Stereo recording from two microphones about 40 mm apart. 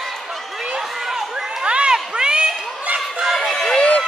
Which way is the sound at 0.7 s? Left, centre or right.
Centre.